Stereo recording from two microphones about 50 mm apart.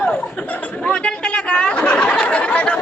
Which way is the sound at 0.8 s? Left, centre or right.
Left.